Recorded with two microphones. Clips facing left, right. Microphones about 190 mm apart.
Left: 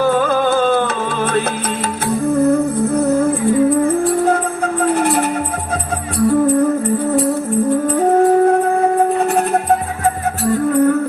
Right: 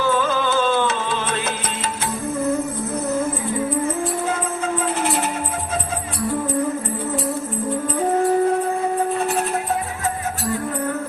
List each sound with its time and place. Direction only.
0.0 s music: 55° left (ahead or behind)
7.9 s music: 60° left (ahead or behind)